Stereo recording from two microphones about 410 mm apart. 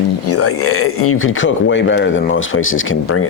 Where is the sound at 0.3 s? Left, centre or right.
Left.